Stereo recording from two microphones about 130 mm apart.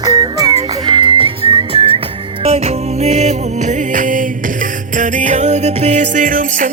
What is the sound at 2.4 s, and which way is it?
Music, 50° right (ahead or behind).